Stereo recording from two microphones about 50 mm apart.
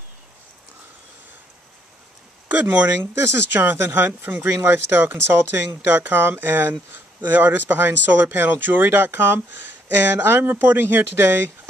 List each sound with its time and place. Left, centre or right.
2.4 s speech: right
3.0 s speech: right
4.6 s speech: right